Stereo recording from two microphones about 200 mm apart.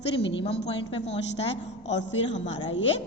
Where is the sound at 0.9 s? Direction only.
30° left (ahead or behind).